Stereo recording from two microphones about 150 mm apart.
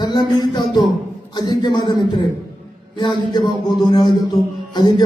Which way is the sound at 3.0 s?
30° left (ahead or behind).